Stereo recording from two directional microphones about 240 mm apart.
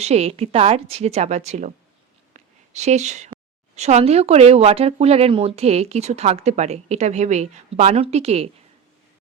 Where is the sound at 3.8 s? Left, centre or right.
Right.